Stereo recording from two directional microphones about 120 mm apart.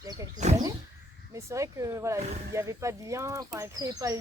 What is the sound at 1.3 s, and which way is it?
Speech, 25° right (ahead or behind).